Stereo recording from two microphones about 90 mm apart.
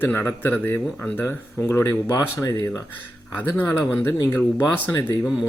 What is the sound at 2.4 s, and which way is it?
Speech, 40° left (ahead or behind).